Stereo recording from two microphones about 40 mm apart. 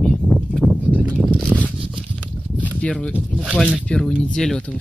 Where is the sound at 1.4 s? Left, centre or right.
Right.